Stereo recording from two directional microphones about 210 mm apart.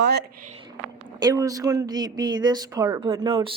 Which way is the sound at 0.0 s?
50° right (ahead or behind).